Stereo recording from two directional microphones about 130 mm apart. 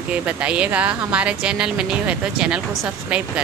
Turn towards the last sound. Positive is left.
turn(degrees=-10)  # may be behind; listen again after turning